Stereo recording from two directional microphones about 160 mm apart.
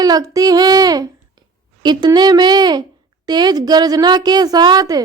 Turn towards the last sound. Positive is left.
turn(degrees=-25)  # may be behind; listen again after turning